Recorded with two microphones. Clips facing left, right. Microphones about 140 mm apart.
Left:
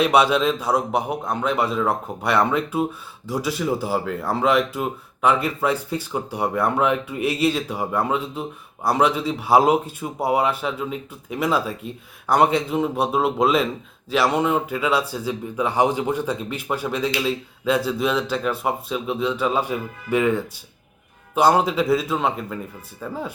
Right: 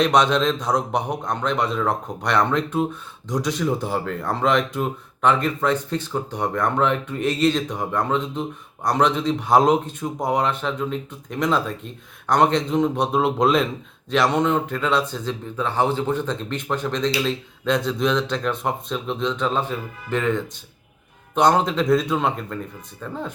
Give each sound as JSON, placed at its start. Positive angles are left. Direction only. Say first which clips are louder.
{"t": 0.0, "sound": "a man's voice", "louder": "left 1 dB", "side_deg": 5}